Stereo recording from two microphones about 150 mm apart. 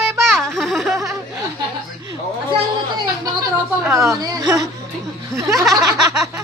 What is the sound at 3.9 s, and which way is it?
Speech, 20° right (ahead or behind).